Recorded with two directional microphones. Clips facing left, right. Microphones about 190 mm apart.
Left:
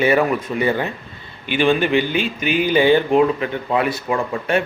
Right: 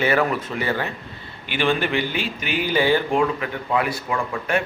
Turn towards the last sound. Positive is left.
turn(degrees=25)  # may be behind; listen again after turning